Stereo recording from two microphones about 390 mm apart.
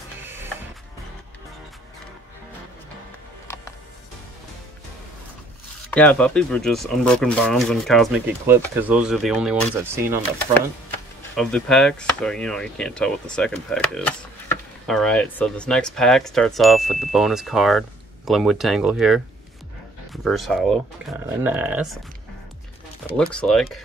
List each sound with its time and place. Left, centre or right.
0.2 s music: centre
5.9 s speech: centre
11.3 s speech: centre
23.1 s speech: centre